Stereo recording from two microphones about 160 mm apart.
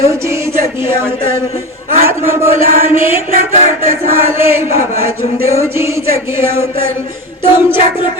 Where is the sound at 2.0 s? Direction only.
15° right (ahead or behind).